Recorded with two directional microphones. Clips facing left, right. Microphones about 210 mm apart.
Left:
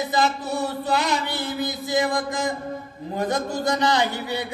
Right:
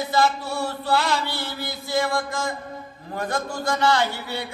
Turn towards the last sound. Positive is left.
turn(degrees=20)  # may be behind; listen again after turning